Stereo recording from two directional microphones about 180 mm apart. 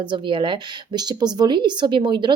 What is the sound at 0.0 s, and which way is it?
Speech, 25° right (ahead or behind).